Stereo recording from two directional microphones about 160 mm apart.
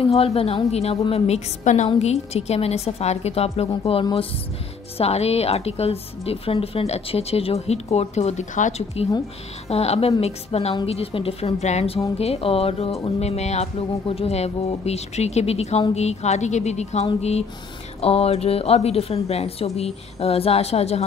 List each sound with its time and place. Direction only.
0.1 s a woman's voice: 40° left (ahead or behind)